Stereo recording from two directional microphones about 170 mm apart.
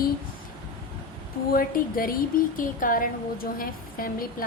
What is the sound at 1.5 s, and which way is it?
Speech, 55° left (ahead or behind).